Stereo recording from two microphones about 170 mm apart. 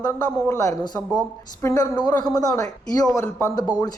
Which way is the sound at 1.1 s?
20° left (ahead or behind).